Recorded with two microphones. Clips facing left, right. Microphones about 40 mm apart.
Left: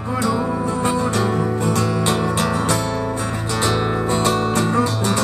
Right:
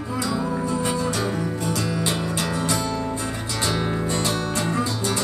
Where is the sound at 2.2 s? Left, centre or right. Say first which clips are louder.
Left 6 dB; left.